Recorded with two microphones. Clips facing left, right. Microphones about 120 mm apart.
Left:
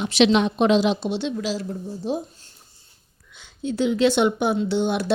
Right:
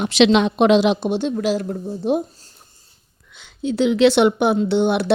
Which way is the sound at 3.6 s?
75° right (ahead or behind).